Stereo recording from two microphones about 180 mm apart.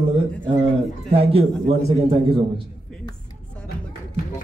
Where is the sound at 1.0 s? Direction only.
30° right (ahead or behind).